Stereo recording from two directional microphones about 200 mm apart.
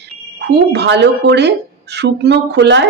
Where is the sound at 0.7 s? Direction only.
60° right (ahead or behind).